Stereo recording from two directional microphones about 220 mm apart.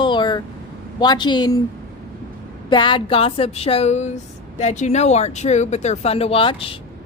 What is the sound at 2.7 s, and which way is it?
Speech, 20° left (ahead or behind).